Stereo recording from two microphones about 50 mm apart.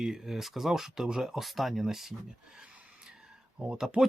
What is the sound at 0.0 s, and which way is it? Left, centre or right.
Speech, centre.